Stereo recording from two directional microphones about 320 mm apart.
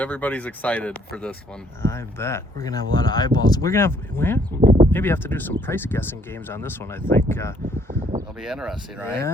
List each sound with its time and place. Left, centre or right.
0.0 s speech: centre
4.6 s a sound: centre
4.9 s speech: centre